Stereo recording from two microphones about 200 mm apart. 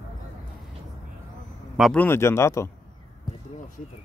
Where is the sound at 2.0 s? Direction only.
10° left (ahead or behind).